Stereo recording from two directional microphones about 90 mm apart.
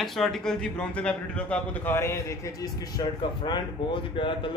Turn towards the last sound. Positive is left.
turn(degrees=65)  # may be behind; listen again after turning